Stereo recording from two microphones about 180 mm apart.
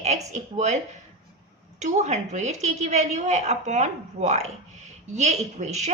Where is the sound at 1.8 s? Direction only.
40° right (ahead or behind).